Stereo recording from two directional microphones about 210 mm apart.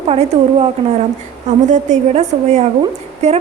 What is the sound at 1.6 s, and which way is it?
A woman's voice, 35° right (ahead or behind).